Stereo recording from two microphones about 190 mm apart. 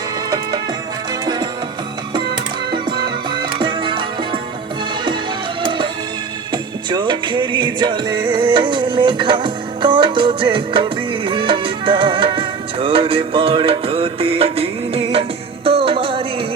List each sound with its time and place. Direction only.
1.2 s music: 20° right (ahead or behind)
3.2 s music: 25° right (ahead or behind)
5.6 s music: 25° right (ahead or behind)